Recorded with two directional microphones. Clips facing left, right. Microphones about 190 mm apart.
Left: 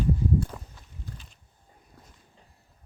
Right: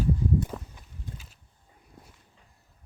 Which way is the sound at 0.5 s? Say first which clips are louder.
Right 5 dB; 5° right (ahead or behind).